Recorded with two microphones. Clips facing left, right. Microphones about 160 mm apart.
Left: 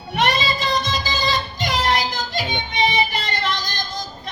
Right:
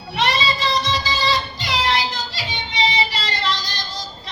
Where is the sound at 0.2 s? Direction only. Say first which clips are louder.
Even; 45° left (ahead or behind).